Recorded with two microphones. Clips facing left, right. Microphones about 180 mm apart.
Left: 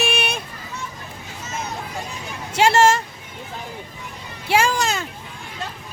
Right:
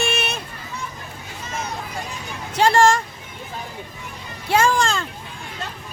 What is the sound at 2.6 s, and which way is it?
Speech, 25° left (ahead or behind).